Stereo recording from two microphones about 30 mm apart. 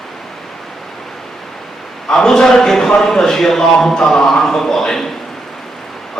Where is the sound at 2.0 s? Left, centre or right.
Centre.